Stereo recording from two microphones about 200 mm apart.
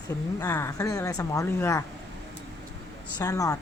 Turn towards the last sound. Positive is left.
turn(degrees=15)  # may be behind; listen again after turning